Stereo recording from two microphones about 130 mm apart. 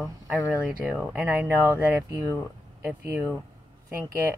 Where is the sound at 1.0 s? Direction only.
20° right (ahead or behind).